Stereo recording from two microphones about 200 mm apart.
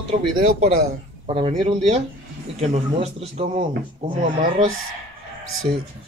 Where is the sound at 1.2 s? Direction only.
30° right (ahead or behind).